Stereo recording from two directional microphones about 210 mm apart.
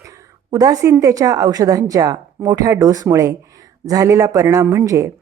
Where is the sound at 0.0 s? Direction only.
15° right (ahead or behind).